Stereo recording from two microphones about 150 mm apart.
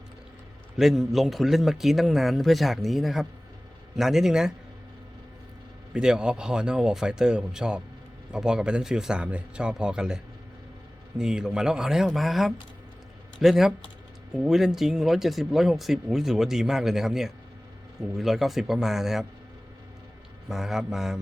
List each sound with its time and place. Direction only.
0.8 s speech: centre (ahead or behind)
5.9 s speech: 5° right (ahead or behind)
11.2 s speech: 5° right (ahead or behind)
20.5 s speech: 5° right (ahead or behind)